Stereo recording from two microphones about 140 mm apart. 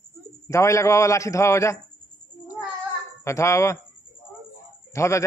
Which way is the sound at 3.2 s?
20° left (ahead or behind).